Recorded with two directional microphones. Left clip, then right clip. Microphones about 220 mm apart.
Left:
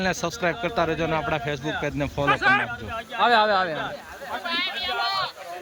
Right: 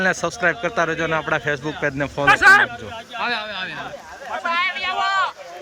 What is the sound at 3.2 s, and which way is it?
Speech, 30° left (ahead or behind).